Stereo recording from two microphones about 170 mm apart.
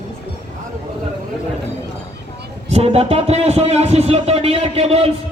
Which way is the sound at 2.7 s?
35° right (ahead or behind).